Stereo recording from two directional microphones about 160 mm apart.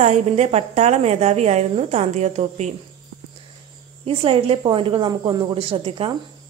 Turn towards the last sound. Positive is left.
turn(degrees=-35)  # may be behind; listen again after turning